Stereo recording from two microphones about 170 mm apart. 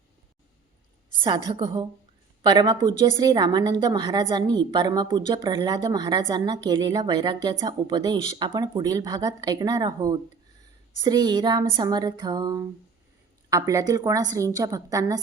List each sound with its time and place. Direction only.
1.5 s speech: 25° right (ahead or behind)